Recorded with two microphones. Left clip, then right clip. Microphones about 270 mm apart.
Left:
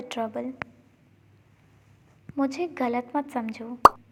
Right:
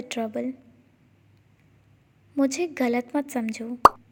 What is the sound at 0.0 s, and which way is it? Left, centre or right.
Speech, right.